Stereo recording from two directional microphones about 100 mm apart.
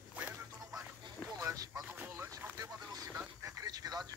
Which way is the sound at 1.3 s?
35° right (ahead or behind).